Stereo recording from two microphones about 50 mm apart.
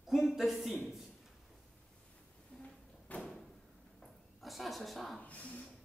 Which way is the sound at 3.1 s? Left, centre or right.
Left.